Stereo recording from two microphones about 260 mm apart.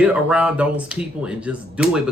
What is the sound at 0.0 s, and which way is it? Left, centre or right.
Speech, centre.